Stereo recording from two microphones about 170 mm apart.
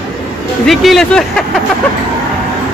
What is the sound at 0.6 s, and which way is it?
Speech, centre (ahead or behind).